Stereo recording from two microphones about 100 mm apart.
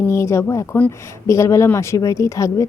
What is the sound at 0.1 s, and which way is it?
A woman's voice, 25° left (ahead or behind).